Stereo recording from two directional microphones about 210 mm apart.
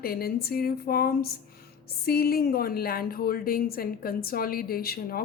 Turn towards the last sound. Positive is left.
turn(degrees=45)  # may be behind; listen again after turning